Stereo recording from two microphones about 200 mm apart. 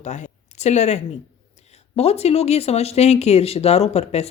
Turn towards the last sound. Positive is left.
turn(degrees=30)  # may be behind; listen again after turning